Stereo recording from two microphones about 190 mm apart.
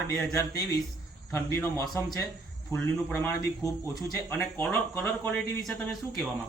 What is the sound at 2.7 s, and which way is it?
Speech, 20° right (ahead or behind).